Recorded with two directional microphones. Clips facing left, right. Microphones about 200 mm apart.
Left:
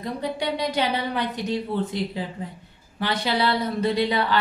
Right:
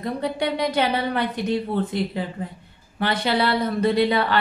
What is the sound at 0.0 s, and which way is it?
Speech, 55° right (ahead or behind).